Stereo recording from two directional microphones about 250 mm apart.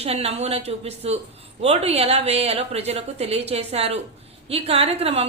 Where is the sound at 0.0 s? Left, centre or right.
Right.